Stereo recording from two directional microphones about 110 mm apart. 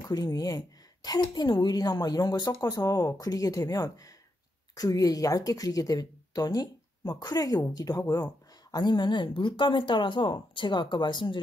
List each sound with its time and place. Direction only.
0.1 s a woman's voice: 35° left (ahead or behind)